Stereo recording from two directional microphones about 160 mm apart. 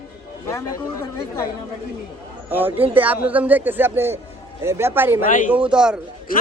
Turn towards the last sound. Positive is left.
turn(degrees=-5)  # may be behind; listen again after turning